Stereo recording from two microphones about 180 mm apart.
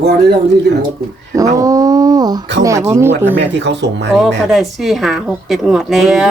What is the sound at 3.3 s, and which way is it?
Speech, 75° right (ahead or behind).